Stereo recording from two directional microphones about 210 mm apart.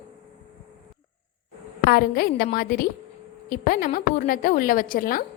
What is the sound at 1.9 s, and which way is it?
A woman's voice, 45° left (ahead or behind).